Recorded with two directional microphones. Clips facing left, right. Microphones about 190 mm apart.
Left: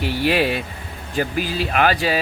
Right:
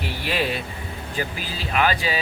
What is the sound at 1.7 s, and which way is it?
Speech, 50° left (ahead or behind).